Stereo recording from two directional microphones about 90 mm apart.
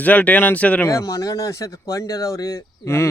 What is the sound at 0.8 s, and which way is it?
Speech, 40° left (ahead or behind).